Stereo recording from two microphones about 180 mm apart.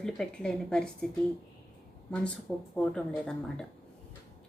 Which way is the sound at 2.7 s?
5° left (ahead or behind).